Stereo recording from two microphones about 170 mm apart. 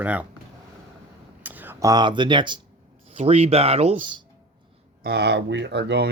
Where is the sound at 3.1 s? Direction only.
40° right (ahead or behind).